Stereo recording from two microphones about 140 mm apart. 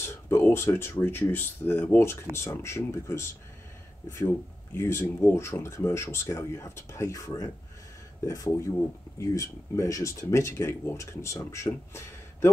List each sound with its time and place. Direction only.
0.0 s speech: 20° left (ahead or behind)